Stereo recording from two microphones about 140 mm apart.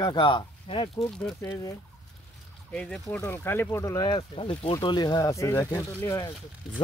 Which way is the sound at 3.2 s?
20° left (ahead or behind).